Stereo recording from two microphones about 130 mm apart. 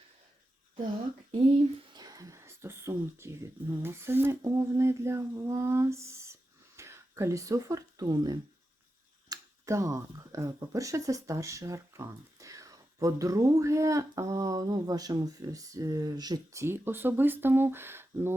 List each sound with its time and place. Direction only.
1.9 s speech: 30° right (ahead or behind)